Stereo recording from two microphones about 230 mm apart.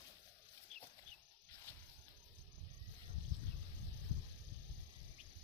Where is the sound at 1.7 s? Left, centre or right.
Centre.